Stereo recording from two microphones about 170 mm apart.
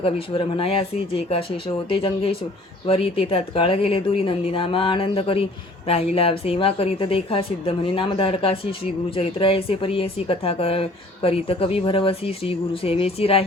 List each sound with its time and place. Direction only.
0.0 s a woman's voice: 35° left (ahead or behind)